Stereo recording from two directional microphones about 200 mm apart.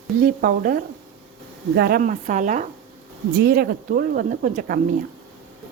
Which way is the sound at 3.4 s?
50° right (ahead or behind).